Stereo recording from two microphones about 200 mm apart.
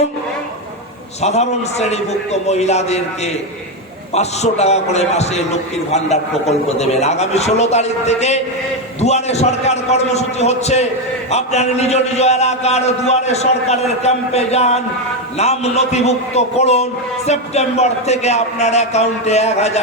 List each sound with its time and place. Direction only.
1.2 s a man's voice: 35° left (ahead or behind)